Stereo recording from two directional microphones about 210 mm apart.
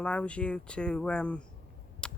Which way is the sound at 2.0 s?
5° left (ahead or behind).